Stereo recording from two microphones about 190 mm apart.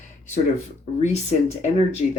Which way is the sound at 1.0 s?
35° left (ahead or behind).